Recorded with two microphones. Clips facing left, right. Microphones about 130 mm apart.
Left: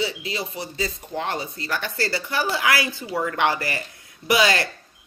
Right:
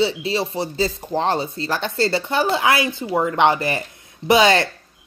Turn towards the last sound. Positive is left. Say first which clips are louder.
# right 5 dB
turn(degrees=-25)  # may be behind; listen again after turning